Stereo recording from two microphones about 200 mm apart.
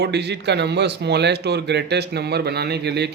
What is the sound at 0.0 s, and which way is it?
A man's voice, 55° right (ahead or behind).